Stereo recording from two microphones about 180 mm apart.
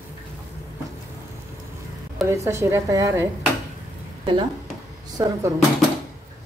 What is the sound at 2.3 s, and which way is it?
Speech, 15° right (ahead or behind).